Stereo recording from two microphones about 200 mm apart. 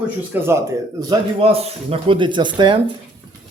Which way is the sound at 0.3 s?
10° right (ahead or behind).